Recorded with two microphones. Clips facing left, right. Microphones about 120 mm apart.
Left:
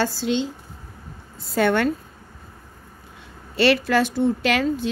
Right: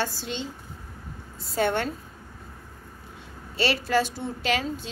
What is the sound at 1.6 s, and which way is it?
Speech, 70° left (ahead or behind).